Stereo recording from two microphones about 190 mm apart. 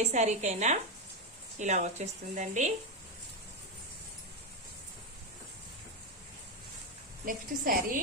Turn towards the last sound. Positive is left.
turn(degrees=-45)  # may be behind; listen again after turning